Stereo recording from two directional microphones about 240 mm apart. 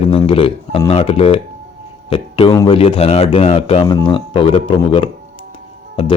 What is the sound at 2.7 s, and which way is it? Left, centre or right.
A man's voice, left.